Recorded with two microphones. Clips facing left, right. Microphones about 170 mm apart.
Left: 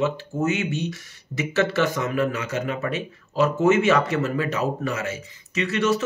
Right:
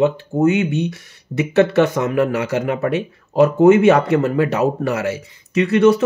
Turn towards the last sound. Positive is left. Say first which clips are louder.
# right 9 dB
turn(degrees=-60)  # may be behind; listen again after turning